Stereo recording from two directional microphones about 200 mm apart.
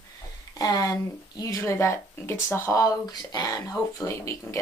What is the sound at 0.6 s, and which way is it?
Speech, 15° left (ahead or behind).